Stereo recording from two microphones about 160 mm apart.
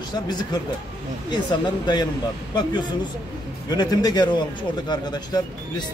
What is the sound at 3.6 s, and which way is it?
Speech, 25° left (ahead or behind).